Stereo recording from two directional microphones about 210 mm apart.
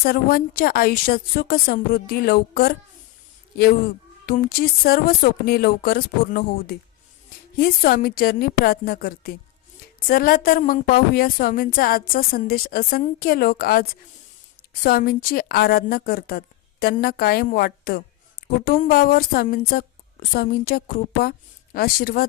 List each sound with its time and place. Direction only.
0.0 s speech: 45° left (ahead or behind)
4.3 s speech: 45° left (ahead or behind)